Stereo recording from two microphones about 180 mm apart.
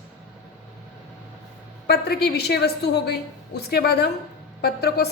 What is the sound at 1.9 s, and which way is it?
A woman's voice, 65° left (ahead or behind).